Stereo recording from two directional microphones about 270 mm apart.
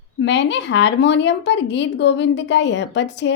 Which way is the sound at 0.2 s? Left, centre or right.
Left.